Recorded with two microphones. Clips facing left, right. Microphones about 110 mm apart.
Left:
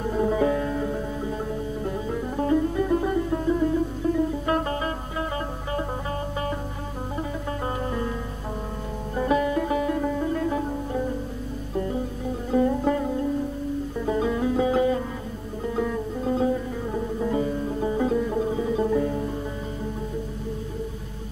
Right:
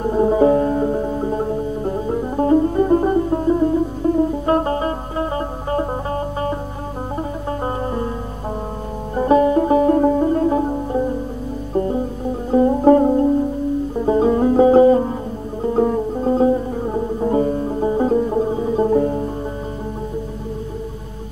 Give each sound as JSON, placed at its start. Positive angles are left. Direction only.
{"t": 0.0, "sound": "music", "side_deg": -35}
{"t": 7.6, "sound": "music", "side_deg": -35}
{"t": 9.1, "sound": "music", "side_deg": -35}